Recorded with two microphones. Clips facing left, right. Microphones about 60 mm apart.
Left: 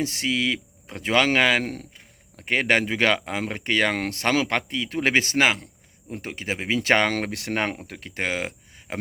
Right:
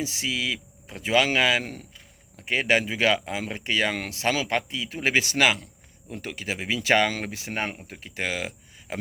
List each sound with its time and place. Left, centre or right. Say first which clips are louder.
0.0 s speech: left 4 dB; left
8.1 s speech: left 2 dB; left